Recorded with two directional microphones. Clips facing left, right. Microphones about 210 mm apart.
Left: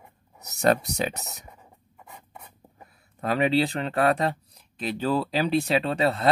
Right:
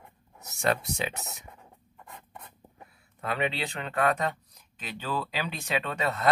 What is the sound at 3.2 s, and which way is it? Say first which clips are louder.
Speech: left 8 dB; 40° left (ahead or behind).